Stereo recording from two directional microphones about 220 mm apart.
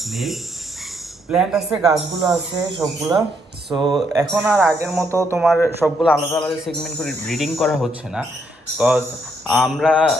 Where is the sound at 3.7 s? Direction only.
20° right (ahead or behind).